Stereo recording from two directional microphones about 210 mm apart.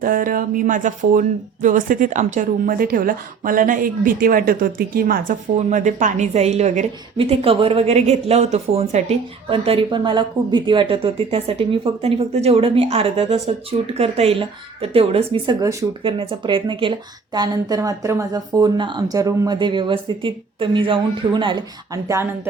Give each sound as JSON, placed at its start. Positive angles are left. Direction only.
{"t": 0.0, "sound": "speech", "side_deg": -40}